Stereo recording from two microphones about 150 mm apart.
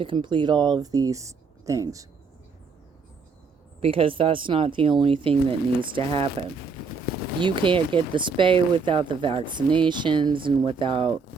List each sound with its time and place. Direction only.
0.0 s speech: 35° right (ahead or behind)
3.8 s speech: 40° right (ahead or behind)